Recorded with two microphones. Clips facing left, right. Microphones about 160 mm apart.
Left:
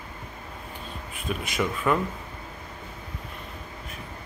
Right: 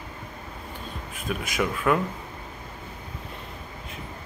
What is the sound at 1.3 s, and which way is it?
Speech, centre (ahead or behind).